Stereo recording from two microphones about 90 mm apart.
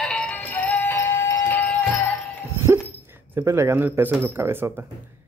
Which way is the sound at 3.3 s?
30° right (ahead or behind).